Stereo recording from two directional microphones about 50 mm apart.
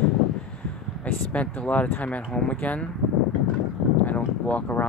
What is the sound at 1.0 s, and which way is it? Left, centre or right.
Speech, left.